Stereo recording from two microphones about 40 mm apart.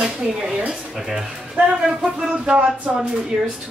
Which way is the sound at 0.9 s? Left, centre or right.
Centre.